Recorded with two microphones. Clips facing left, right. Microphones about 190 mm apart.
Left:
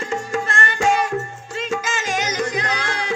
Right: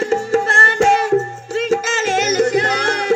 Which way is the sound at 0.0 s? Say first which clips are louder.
Right 8 dB; 40° right (ahead or behind).